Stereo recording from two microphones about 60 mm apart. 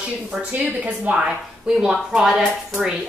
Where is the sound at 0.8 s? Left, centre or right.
Centre.